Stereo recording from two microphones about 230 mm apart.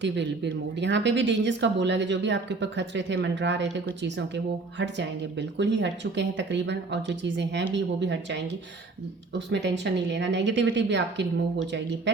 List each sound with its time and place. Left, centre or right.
0.0 s speech: right
9.5 s speech: right